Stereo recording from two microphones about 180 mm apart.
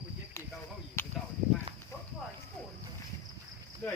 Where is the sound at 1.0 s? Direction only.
10° left (ahead or behind).